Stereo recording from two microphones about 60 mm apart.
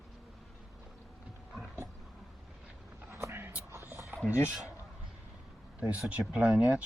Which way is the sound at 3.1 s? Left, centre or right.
Right.